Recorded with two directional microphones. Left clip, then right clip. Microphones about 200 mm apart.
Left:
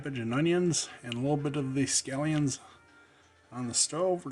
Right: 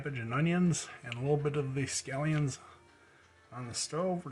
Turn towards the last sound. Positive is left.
turn(degrees=65)  # may be behind; listen again after turning